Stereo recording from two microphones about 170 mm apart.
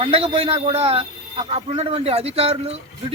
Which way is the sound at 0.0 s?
35° right (ahead or behind).